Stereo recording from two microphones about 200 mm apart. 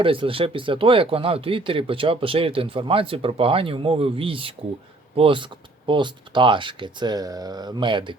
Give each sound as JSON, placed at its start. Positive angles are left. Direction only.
{"t": 0.0, "sound": "speech", "side_deg": -25}